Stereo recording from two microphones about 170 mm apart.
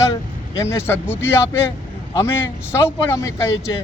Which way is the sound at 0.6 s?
15° left (ahead or behind).